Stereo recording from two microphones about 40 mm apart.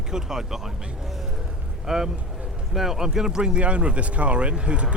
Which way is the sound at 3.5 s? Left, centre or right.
Right.